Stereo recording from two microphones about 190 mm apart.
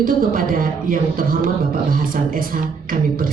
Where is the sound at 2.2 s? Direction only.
50° right (ahead or behind).